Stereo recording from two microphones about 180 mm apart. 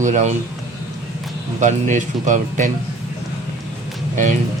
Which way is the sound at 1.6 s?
45° right (ahead or behind).